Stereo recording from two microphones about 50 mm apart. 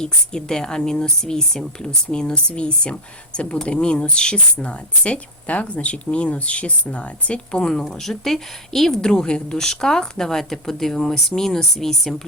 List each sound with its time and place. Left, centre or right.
0.0 s a woman's voice: centre